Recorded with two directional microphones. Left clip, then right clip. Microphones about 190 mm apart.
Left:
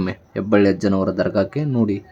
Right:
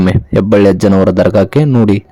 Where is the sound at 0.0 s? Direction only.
45° right (ahead or behind).